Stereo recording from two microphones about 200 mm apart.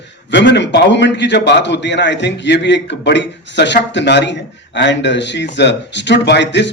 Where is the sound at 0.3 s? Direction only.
60° left (ahead or behind).